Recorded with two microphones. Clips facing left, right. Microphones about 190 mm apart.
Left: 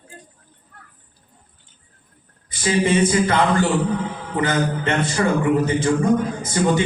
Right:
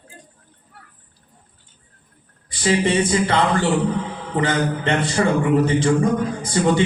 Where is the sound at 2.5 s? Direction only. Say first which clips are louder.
Even; 30° right (ahead or behind).